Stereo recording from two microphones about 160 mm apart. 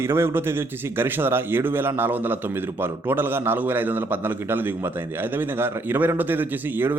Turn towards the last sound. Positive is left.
turn(degrees=-10)  # may be behind; listen again after turning